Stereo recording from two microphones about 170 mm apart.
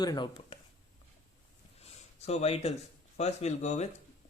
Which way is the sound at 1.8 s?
40° left (ahead or behind).